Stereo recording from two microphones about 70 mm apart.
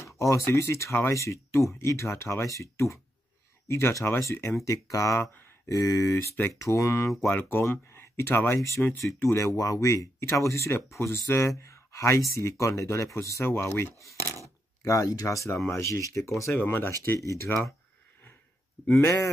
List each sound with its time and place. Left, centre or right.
0.0 s speech: left
7.2 s speech: left
8.5 s speech: left
14.2 s filing: left
14.8 s speech: left
16.5 s speech: left
18.9 s speech: left